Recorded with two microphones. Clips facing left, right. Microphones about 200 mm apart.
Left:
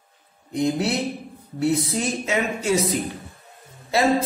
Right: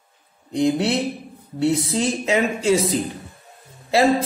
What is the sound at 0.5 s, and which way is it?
Speech, 30° right (ahead or behind).